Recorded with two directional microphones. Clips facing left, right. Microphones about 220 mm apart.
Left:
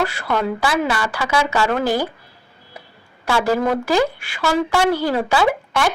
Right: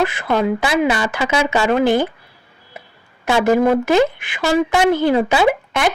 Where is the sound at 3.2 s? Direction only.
20° right (ahead or behind).